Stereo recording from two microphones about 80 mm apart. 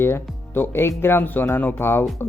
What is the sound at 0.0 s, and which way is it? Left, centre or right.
Speech, left.